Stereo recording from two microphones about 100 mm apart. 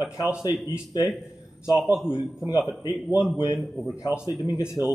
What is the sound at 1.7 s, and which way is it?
Speech, 5° right (ahead or behind).